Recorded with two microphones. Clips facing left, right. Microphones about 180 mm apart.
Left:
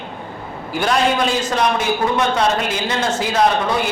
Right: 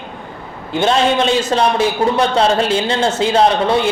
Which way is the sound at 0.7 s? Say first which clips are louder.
Right 3 dB; 25° right (ahead or behind).